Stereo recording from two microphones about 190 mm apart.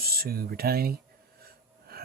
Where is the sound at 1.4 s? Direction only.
55° right (ahead or behind).